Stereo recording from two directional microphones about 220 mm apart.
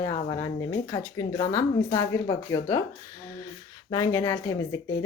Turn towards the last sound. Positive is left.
turn(degrees=15)  # may be behind; listen again after turning